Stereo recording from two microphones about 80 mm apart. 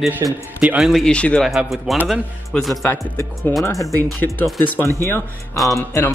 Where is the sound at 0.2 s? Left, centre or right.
Right.